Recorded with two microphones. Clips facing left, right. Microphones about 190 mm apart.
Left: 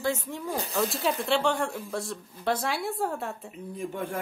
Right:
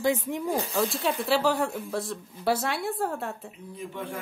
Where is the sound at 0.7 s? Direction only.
Centre (ahead or behind).